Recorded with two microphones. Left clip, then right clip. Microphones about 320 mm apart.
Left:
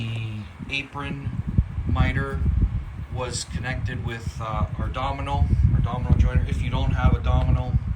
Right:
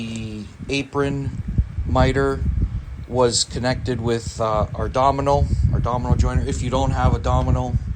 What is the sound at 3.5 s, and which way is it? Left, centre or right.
Speech, right.